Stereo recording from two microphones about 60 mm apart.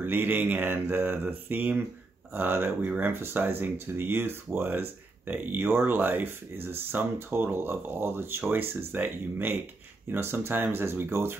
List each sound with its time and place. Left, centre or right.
0.0 s speech: right